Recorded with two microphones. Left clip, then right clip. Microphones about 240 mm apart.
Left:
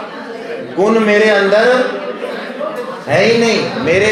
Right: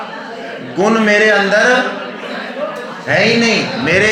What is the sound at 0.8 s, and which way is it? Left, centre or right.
Speech, right.